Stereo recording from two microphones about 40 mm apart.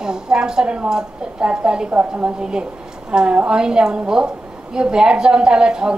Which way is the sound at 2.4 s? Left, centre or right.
Right.